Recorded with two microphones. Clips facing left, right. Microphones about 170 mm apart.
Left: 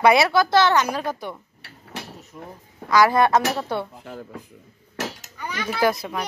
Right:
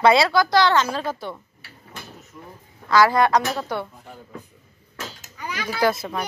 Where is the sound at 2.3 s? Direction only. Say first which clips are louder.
Left 4 dB; 20° left (ahead or behind).